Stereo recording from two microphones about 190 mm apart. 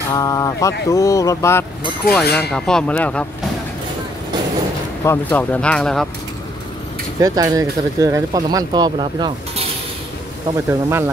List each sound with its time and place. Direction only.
0.1 s speech: 20° left (ahead or behind)
2.2 s speech: 55° left (ahead or behind)
2.5 s speech: 5° left (ahead or behind)
5.0 s speech: 10° left (ahead or behind)
7.2 s speech: 20° right (ahead or behind)
10.7 s speech: 15° right (ahead or behind)